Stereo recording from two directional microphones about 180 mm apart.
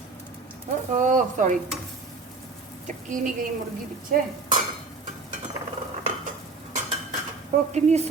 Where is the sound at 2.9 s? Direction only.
45° right (ahead or behind).